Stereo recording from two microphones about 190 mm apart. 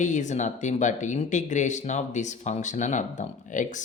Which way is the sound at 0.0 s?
40° left (ahead or behind).